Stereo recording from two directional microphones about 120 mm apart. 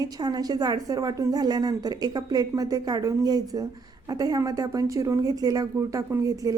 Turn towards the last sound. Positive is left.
turn(degrees=-30)  # may be behind; listen again after turning